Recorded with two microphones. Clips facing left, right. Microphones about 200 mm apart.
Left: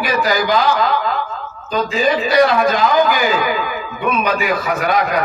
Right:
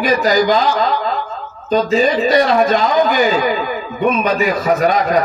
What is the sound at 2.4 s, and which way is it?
A man's voice, 35° right (ahead or behind).